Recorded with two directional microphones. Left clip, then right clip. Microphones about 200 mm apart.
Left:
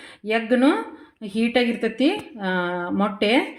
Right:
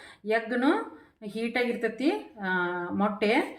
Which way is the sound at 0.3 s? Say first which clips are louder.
Left 6 dB; 45° left (ahead or behind).